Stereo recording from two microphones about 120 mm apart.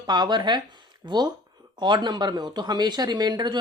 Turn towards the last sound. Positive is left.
turn(degrees=-35)  # may be behind; listen again after turning